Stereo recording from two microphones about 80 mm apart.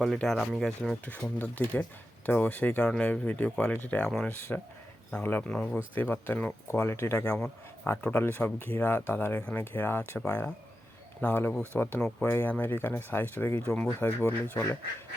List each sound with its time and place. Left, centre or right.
0.2 s speech: centre
0.8 s speech: centre; by 7.3 s left
7.3 s speech: centre
7.9 s speech: left